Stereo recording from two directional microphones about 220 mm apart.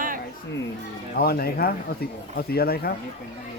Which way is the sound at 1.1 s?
45° left (ahead or behind).